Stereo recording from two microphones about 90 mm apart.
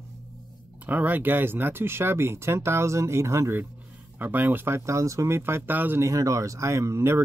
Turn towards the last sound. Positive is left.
turn(degrees=-30)  # may be behind; listen again after turning